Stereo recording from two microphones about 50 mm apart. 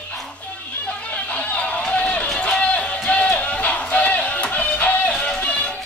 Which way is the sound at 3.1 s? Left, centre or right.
Left.